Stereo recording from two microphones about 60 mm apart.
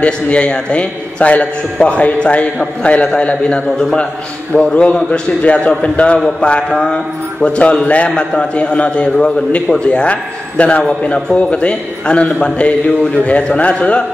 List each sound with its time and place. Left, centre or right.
0.0 s a man's voice: centre